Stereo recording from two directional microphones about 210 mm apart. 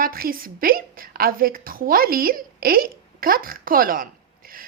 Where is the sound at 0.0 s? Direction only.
45° right (ahead or behind).